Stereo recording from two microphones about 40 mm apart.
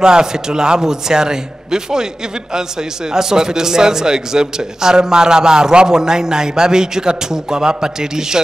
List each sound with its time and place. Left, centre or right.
0.0 s a man's voice: centre